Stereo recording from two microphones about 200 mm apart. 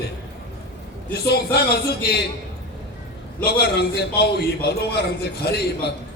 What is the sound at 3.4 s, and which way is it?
A man's voice, 55° left (ahead or behind).